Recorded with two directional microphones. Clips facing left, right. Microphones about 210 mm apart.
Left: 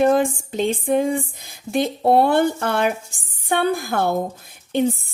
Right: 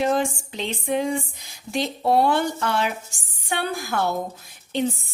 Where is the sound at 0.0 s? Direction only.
50° left (ahead or behind).